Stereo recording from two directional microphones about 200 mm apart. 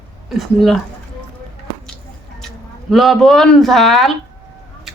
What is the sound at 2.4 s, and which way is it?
Speech, centre (ahead or behind).